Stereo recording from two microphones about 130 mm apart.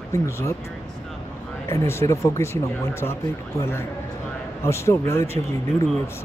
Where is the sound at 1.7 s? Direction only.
20° left (ahead or behind).